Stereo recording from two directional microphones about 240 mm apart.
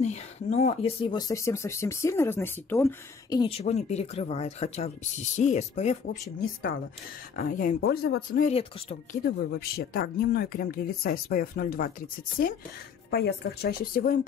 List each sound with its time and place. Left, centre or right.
0.0 s speech: left
7.3 s speech: left
8.5 s speech: left
9.2 s speech: left